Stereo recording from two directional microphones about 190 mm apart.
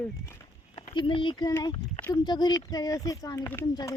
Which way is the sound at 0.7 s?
25° left (ahead or behind).